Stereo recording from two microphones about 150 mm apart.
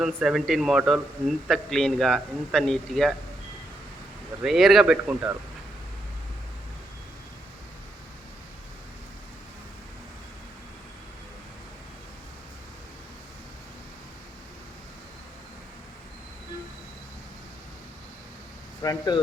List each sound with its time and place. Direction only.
0.0 s a man's voice: 5° right (ahead or behind)
4.4 s a man's voice: centre (ahead or behind)
18.8 s speech: 25° left (ahead or behind)